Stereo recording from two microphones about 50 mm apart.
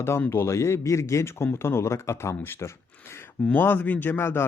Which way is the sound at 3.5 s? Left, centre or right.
Left.